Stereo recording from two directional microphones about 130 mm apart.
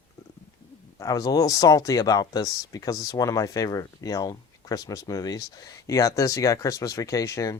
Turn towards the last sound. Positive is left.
turn(degrees=25)  # may be behind; listen again after turning